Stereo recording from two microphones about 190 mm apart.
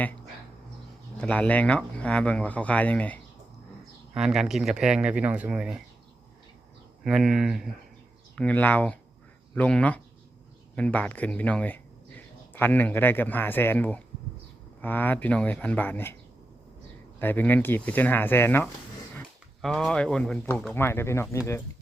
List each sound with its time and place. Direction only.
1.2 s speech: 10° left (ahead or behind)
4.1 s speech: 5° right (ahead or behind)
7.0 s speech: centre (ahead or behind)
17.2 s speech: 10° left (ahead or behind)